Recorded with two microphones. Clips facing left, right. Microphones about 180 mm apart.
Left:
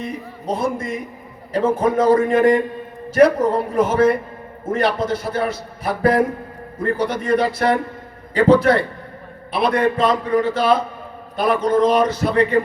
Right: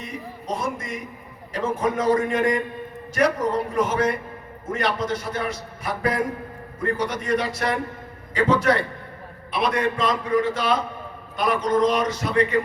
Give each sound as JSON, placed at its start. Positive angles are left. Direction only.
{"t": 0.0, "sound": "a man's voice", "side_deg": 30}